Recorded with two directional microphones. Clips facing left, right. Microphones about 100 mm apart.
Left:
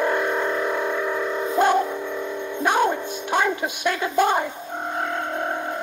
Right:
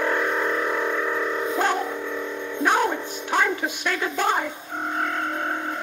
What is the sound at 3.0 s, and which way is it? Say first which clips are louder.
Music: left 1 dB; 15° left (ahead or behind).